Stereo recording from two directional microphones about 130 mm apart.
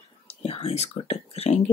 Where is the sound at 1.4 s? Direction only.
55° left (ahead or behind).